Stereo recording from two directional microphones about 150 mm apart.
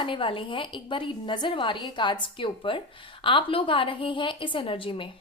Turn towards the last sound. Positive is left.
turn(degrees=35)  # may be behind; listen again after turning